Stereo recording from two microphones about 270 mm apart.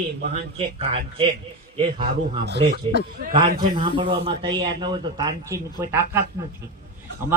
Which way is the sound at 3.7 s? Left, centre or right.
Centre.